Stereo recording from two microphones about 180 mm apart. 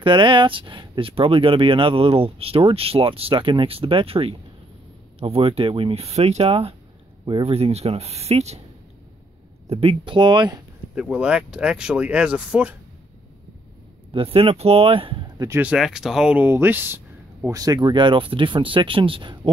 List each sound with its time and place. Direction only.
0.0 s speech: 25° right (ahead or behind)
9.7 s speech: 35° right (ahead or behind)
11.0 s speech: 5° right (ahead or behind)
14.1 s speech: 30° right (ahead or behind)